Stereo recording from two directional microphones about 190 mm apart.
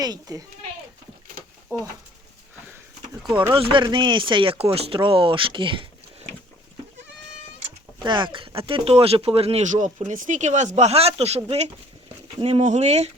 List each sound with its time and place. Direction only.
0.0 s speech: 20° right (ahead or behind)
1.7 s speech: 20° right (ahead or behind)
3.5 s speech: 25° right (ahead or behind)
8.0 s speech: 25° right (ahead or behind)